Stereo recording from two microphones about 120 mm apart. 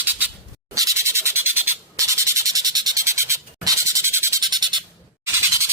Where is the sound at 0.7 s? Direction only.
25° right (ahead or behind).